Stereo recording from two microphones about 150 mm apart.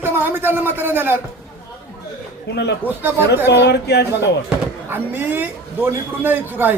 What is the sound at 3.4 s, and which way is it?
Speech, 90° left.